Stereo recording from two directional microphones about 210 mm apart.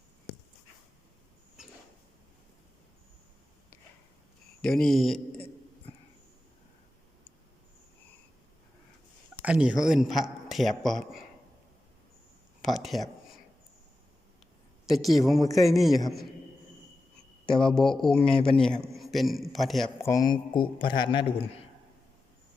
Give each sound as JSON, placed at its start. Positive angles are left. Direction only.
{"t": 4.6, "sound": "a man's voice", "side_deg": 5}
{"t": 9.3, "sound": "a man's voice", "side_deg": -5}
{"t": 12.6, "sound": "a sound", "side_deg": 0}
{"t": 14.8, "sound": "a man's voice", "side_deg": 0}
{"t": 17.4, "sound": "a man's voice", "side_deg": 5}
{"t": 20.0, "sound": "a man's voice", "side_deg": 15}